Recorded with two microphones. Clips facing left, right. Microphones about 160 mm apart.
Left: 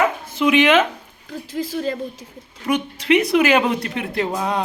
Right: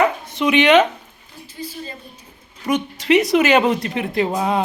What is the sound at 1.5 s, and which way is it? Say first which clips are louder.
Speech: left 9 dB; 90° left.